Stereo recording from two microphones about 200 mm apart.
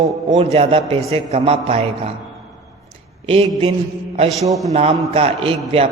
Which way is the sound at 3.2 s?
30° right (ahead or behind).